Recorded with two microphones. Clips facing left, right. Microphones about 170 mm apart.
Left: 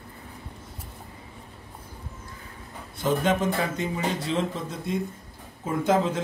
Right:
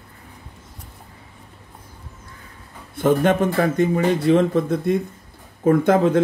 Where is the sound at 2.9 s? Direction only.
55° right (ahead or behind).